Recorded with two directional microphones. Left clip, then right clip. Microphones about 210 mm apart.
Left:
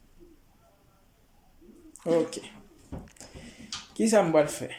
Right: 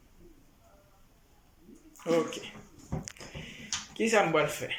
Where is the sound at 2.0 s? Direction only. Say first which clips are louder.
Left 3 dB; 20° left (ahead or behind).